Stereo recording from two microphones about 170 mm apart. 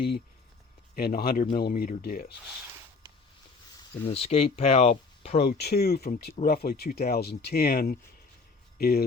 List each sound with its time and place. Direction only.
0.9 s speech: 65° left (ahead or behind)
4.1 s speech: 35° left (ahead or behind)
5.4 s speech: 70° left (ahead or behind)